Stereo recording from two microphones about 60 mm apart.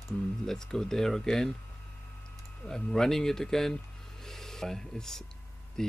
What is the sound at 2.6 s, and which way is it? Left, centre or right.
Speech, centre.